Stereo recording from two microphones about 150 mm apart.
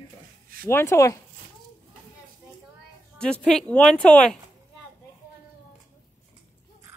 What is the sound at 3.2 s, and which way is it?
Speech, 5° left (ahead or behind).